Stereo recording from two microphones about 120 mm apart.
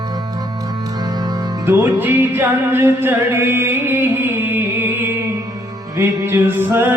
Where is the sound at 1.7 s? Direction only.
15° right (ahead or behind).